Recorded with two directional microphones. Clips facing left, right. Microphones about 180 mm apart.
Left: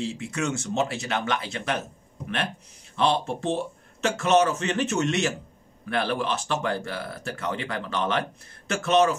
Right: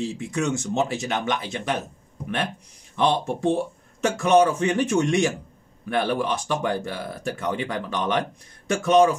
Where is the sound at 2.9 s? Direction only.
15° right (ahead or behind).